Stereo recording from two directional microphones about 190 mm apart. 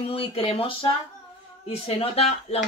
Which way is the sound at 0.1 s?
30° left (ahead or behind).